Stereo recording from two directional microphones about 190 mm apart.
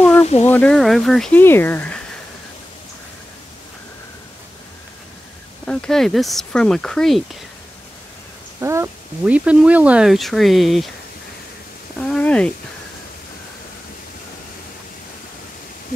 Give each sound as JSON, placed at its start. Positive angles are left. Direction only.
{"t": 0.2, "sound": "a sound", "side_deg": 35}
{"t": 0.5, "sound": "speech", "side_deg": 5}
{"t": 5.7, "sound": "speech", "side_deg": 5}
{"t": 8.5, "sound": "speech", "side_deg": -15}
{"t": 12.1, "sound": "speech", "side_deg": 5}